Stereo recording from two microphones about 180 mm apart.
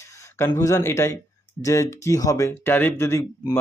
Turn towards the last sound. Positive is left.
turn(degrees=15)  # may be behind; listen again after turning